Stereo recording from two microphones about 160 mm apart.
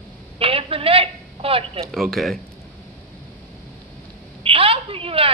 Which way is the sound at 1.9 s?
Centre (ahead or behind).